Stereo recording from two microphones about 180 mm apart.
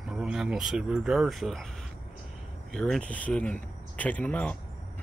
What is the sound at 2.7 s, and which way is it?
Speech, 5° left (ahead or behind).